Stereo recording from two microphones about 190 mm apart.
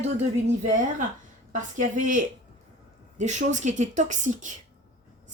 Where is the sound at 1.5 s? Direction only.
40° right (ahead or behind).